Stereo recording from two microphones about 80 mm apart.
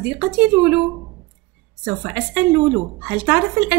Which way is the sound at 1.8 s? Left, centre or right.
Right.